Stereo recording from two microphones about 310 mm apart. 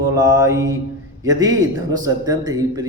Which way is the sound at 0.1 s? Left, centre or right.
Centre.